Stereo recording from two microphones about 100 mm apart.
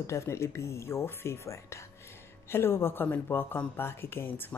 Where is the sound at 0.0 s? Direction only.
30° left (ahead or behind).